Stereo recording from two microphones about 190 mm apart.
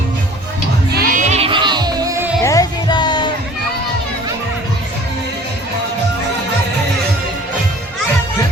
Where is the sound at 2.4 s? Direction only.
20° left (ahead or behind).